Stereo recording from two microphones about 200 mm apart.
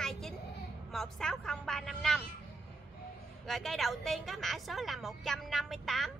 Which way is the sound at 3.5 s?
Centre (ahead or behind).